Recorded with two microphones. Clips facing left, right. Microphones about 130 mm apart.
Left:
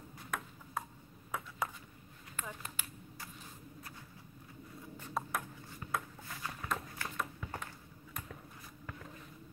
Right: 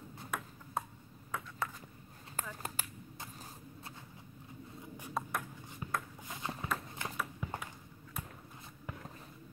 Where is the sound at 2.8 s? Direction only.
40° right (ahead or behind).